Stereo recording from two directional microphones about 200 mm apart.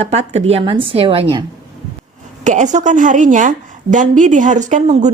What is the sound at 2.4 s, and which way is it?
A woman's voice, 40° right (ahead or behind).